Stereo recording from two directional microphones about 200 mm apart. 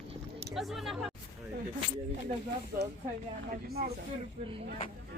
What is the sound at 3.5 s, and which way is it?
Speech, 50° right (ahead or behind).